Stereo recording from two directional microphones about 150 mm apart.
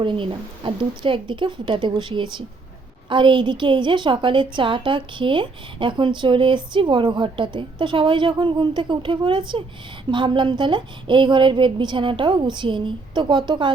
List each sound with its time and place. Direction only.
0.0 s a woman's voice: 35° right (ahead or behind)